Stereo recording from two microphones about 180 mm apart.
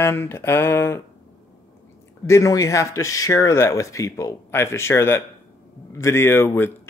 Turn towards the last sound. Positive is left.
turn(degrees=10)  # may be behind; listen again after turning